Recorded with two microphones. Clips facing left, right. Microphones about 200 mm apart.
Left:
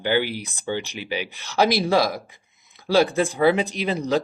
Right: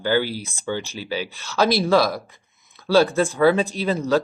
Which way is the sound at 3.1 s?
15° left (ahead or behind).